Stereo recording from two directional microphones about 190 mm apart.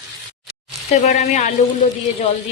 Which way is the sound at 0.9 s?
40° left (ahead or behind).